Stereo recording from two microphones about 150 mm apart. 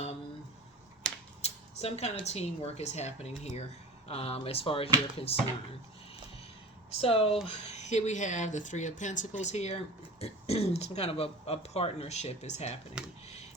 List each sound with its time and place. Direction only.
1.4 s a sound: 45° left (ahead or behind)
2.2 s speech: 45° left (ahead or behind)
7.0 s speech: 40° left (ahead or behind)
13.0 s speech: 5° right (ahead or behind)